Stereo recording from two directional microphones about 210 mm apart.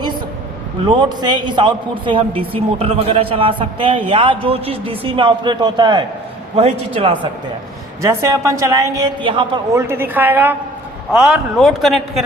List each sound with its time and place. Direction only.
0.9 s a man's voice: 20° right (ahead or behind)
8.0 s a woman's voice: 15° right (ahead or behind)
9.8 s a woman's voice: 10° right (ahead or behind)